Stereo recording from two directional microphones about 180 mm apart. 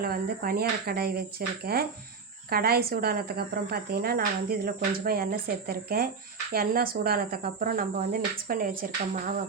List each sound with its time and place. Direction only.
0.0 s speech: 55° right (ahead or behind)